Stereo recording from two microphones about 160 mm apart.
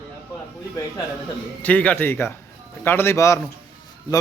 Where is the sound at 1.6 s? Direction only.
10° left (ahead or behind).